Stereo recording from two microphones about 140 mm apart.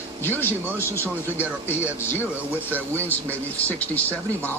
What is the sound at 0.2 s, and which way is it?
Speech, 15° left (ahead or behind).